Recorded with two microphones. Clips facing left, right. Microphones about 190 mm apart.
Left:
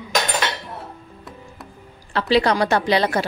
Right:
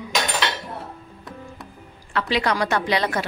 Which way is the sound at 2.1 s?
35° left (ahead or behind).